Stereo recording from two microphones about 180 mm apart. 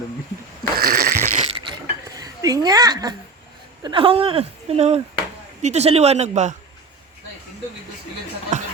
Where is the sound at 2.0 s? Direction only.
20° right (ahead or behind); by 6.6 s 40° right (ahead or behind).